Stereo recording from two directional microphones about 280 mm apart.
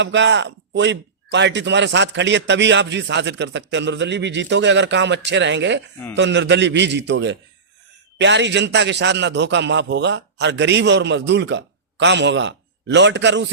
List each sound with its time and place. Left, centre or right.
0.0 s a man's voice: right